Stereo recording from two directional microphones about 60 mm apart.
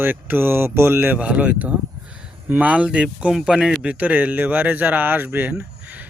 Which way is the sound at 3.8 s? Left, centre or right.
Right.